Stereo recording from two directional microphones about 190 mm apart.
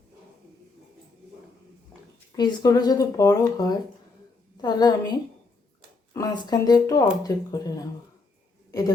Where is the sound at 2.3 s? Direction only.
20° left (ahead or behind).